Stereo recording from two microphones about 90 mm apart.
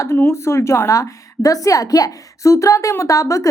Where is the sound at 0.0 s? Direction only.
30° left (ahead or behind).